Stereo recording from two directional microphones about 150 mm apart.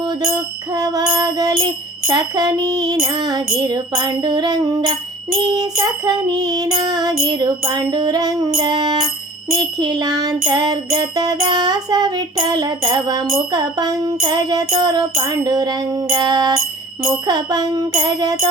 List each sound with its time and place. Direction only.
0.7 s music: 25° right (ahead or behind)